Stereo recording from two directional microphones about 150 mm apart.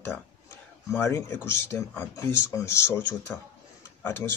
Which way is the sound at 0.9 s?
20° left (ahead or behind).